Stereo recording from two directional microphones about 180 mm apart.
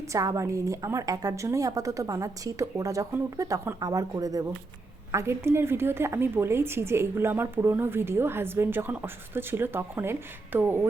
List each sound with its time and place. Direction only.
0.1 s a woman's voice: 20° right (ahead or behind)